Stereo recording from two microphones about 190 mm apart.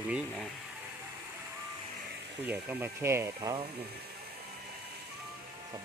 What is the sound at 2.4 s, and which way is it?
Speech, 10° right (ahead or behind).